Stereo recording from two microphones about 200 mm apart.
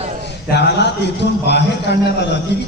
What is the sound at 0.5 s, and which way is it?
A man's voice, 55° left (ahead or behind).